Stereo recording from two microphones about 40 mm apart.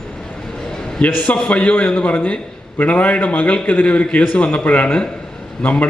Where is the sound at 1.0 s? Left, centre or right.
Left.